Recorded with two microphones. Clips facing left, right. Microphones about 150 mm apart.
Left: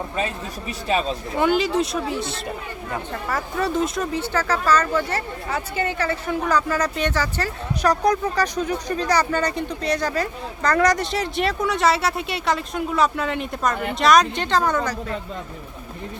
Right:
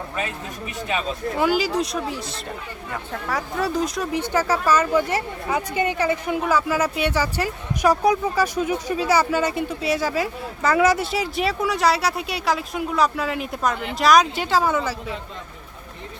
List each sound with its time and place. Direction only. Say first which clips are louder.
0.9 s speech: left 4 dB; 35° left (ahead or behind)
1.4 s speech: left 2 dB; centre (ahead or behind)
4.1 s speech: right 1 dB; 15° right (ahead or behind)